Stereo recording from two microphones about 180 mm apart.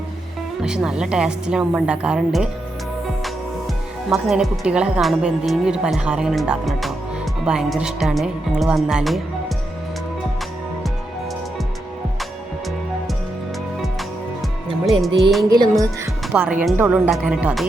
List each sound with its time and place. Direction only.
0.6 s a woman's voice: 5° right (ahead or behind)
4.1 s a woman's voice: centre (ahead or behind)
15.0 s a woman's voice: centre (ahead or behind)
15.4 s music: 20° right (ahead or behind)
16.3 s speech: 5° right (ahead or behind)